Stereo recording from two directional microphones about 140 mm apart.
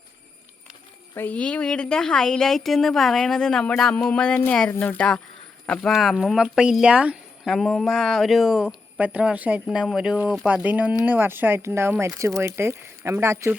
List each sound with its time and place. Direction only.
1.1 s speech: 10° left (ahead or behind); by 13.5 s 20° right (ahead or behind)